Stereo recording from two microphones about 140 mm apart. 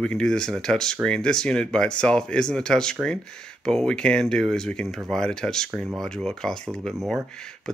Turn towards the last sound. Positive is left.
turn(degrees=5)  # may be behind; listen again after turning